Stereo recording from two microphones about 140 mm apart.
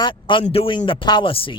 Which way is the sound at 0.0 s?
35° left (ahead or behind).